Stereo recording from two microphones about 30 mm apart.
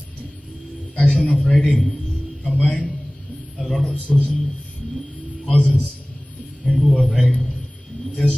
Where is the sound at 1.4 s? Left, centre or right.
Centre.